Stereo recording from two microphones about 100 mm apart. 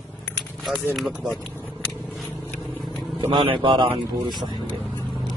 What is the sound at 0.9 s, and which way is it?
Speech, centre (ahead or behind).